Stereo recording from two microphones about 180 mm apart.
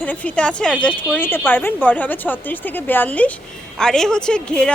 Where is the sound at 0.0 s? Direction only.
10° left (ahead or behind).